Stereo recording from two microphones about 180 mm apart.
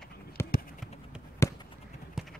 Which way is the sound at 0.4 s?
15° left (ahead or behind).